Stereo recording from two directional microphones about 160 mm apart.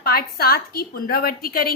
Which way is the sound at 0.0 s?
70° left (ahead or behind).